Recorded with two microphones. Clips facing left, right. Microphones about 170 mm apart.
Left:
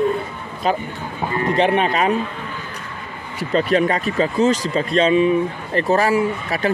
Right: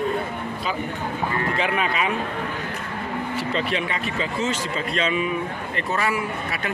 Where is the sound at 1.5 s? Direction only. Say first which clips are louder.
Left 11 dB; 35° left (ahead or behind).